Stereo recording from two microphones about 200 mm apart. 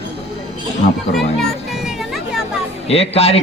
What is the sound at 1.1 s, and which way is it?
Music, centre (ahead or behind).